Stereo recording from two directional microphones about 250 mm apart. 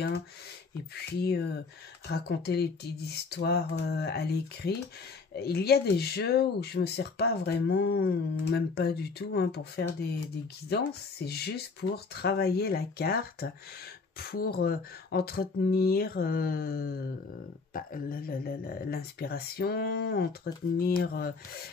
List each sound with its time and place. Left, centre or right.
1.2 s speech: left